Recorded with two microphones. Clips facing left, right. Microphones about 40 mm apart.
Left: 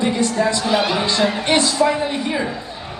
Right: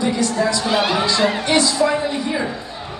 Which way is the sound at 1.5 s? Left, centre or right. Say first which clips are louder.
Left 1 dB; left.